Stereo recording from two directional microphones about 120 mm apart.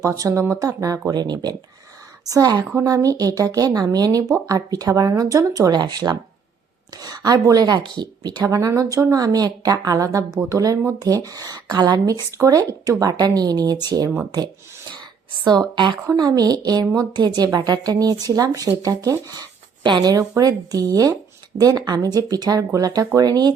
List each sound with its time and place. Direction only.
0.0 s a woman's voice: 30° right (ahead or behind)
15.4 s a woman's voice: 40° right (ahead or behind)